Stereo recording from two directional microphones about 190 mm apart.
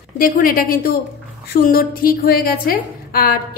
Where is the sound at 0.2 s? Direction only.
50° left (ahead or behind).